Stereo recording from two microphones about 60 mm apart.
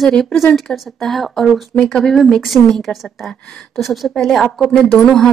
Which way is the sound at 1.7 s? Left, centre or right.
Centre.